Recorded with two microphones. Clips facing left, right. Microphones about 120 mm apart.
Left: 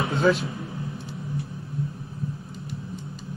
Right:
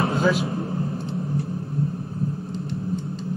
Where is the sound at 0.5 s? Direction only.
50° right (ahead or behind).